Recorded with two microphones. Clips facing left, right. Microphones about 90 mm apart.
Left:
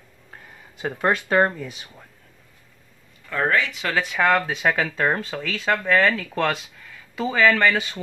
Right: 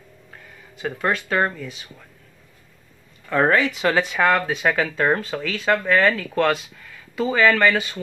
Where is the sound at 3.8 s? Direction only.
15° right (ahead or behind).